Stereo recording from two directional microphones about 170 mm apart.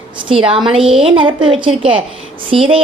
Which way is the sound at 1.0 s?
30° right (ahead or behind).